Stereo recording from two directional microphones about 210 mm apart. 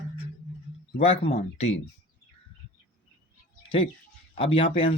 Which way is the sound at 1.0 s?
25° left (ahead or behind).